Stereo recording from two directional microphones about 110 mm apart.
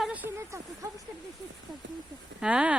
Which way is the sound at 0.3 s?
25° right (ahead or behind).